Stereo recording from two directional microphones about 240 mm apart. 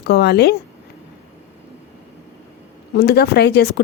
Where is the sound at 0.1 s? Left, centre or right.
Left.